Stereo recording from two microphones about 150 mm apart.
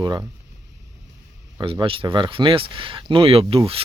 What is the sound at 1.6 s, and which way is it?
Speech, 35° right (ahead or behind).